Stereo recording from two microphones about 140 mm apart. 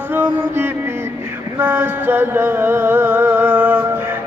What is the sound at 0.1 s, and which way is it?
Mantra, 15° right (ahead or behind).